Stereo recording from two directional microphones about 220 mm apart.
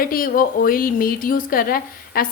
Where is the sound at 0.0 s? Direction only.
40° left (ahead or behind).